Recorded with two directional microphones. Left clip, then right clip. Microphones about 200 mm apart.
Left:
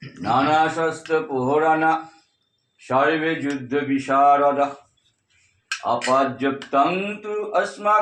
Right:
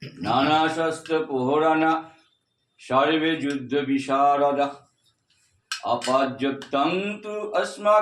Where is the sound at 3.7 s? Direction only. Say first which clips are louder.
Left 2 dB; 15° left (ahead or behind).